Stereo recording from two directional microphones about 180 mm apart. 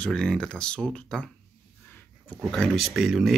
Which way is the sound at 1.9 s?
10° left (ahead or behind).